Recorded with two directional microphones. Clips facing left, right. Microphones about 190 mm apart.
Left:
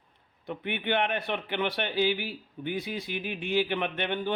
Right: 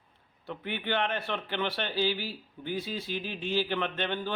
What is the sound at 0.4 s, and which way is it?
Speech, 20° left (ahead or behind).